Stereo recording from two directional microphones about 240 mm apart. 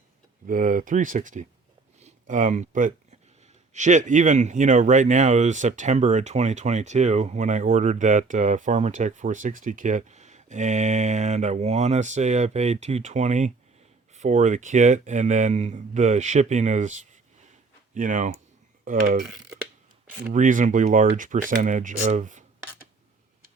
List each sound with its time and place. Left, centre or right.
0.4 s speech: right
20.3 s speech: right